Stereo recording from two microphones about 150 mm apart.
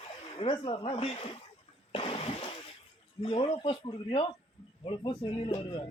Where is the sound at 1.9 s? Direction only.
40° left (ahead or behind).